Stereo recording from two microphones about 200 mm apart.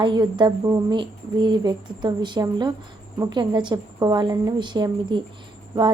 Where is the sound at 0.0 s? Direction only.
20° right (ahead or behind).